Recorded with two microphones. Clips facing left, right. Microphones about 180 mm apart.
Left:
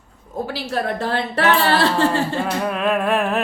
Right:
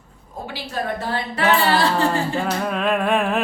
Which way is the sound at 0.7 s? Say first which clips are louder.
Left 2 dB; 70° left (ahead or behind).